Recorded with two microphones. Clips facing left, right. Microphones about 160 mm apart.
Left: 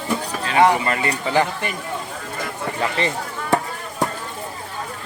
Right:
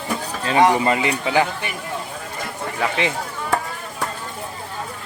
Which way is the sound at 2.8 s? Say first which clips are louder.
Right 1 dB; 10° right (ahead or behind).